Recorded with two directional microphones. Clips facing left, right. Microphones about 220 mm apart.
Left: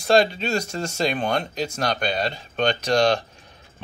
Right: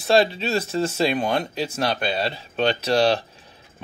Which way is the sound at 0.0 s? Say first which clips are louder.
Even; 5° right (ahead or behind).